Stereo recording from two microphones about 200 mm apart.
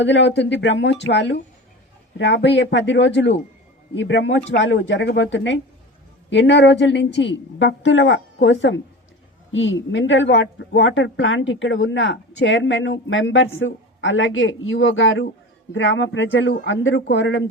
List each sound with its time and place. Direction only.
0.0 s a woman's voice: 65° left (ahead or behind)